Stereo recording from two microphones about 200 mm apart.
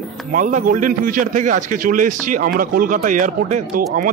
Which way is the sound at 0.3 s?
40° right (ahead or behind).